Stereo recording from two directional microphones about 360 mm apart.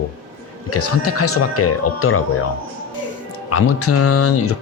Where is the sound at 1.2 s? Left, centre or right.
Left.